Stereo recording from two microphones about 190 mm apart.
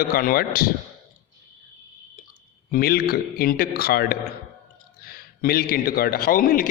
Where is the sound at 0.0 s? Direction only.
50° left (ahead or behind).